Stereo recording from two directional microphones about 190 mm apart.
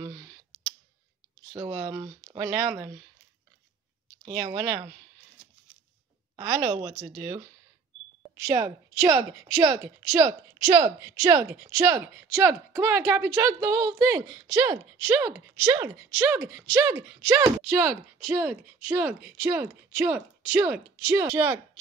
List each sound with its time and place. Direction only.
0.0 s clicking: 15° right (ahead or behind)
1.5 s a woman's voice: 15° right (ahead or behind)
4.4 s speech: 20° right (ahead or behind)
6.4 s speech: 25° right (ahead or behind)
8.2 s a woman's voice: 15° right (ahead or behind)